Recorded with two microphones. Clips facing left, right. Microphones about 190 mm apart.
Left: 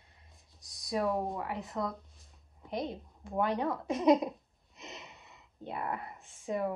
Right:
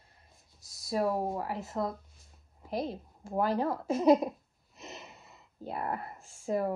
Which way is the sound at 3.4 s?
Centre (ahead or behind).